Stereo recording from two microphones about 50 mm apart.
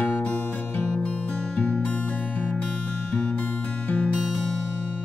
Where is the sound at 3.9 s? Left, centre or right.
Left.